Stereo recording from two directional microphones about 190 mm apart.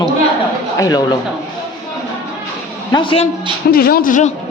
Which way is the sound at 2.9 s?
25° left (ahead or behind).